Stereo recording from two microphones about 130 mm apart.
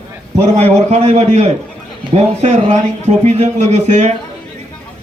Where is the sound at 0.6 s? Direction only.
55° right (ahead or behind).